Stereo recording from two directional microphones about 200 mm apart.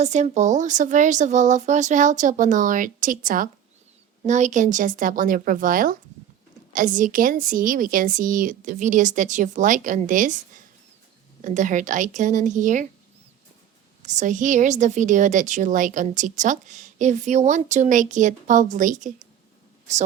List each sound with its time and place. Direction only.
0.0 s a woman's voice: 35° right (ahead or behind)
14.0 s a woman's voice: 35° right (ahead or behind)